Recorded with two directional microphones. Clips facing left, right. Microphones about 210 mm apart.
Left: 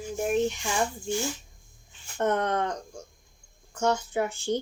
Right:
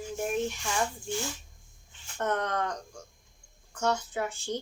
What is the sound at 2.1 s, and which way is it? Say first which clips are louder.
Speech: left 4 dB; 25° left (ahead or behind).